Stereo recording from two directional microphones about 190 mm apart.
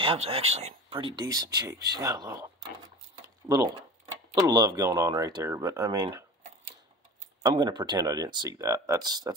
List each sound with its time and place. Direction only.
0.0 s speech: 30° right (ahead or behind)
3.4 s speech: 15° right (ahead or behind)
7.4 s speech: 20° right (ahead or behind)